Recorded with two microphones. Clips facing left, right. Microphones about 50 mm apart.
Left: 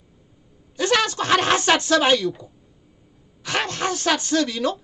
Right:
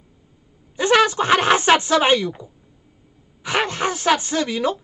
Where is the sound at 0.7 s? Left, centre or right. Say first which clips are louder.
Right 5 dB; right.